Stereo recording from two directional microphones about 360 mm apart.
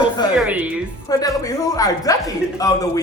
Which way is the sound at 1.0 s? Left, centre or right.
Centre.